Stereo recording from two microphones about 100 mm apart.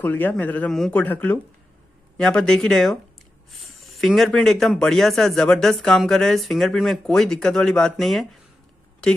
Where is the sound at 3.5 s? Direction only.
Centre (ahead or behind).